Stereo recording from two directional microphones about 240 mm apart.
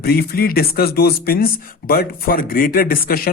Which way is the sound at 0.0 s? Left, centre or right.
Left.